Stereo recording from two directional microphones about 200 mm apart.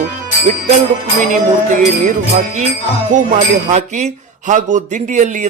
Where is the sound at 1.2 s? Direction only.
40° right (ahead or behind).